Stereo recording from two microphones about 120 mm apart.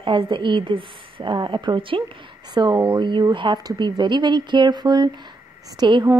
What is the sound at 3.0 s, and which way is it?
Speech, 40° right (ahead or behind).